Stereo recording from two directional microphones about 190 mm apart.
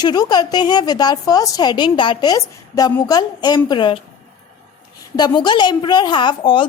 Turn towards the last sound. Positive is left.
turn(degrees=25)  # may be behind; listen again after turning